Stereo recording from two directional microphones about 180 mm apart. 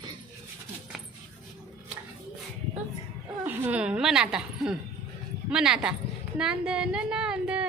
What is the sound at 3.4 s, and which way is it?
A woman's voice, 10° right (ahead or behind).